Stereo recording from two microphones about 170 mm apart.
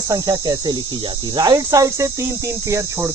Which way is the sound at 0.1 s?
20° right (ahead or behind).